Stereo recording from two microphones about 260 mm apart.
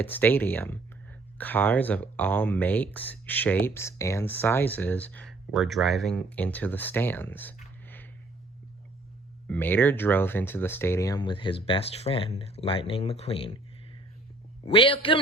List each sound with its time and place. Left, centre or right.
0.0 s speech: centre
9.5 s speech: centre
14.6 s speech: centre